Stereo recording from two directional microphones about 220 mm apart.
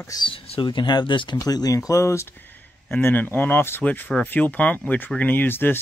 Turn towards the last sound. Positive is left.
turn(degrees=10)  # may be behind; listen again after turning